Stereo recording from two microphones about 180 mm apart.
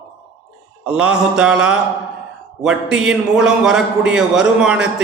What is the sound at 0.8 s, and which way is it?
A man's voice, 5° right (ahead or behind).